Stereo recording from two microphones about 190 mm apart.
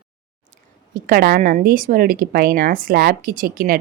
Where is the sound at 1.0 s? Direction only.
50° right (ahead or behind).